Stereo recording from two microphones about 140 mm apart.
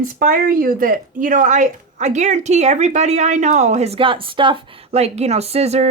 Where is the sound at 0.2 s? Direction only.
90° right.